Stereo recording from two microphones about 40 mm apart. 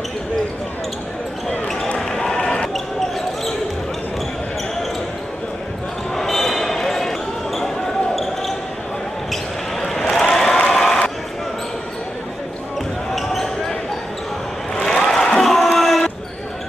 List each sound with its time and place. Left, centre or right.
2.0 s basketball bounce: centre
2.3 s basketball bounce: left
6.1 s basketball bounce: centre
9.3 s basketball bounce: centre
10.1 s applause: centre
10.7 s a sound: centre
13.1 s basketball bounce: centre
14.8 s a sound: centre